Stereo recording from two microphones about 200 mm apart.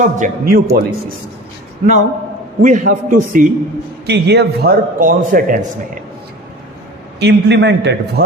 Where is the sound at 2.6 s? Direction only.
40° right (ahead or behind).